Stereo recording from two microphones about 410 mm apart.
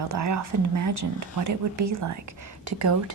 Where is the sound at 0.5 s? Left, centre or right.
Right.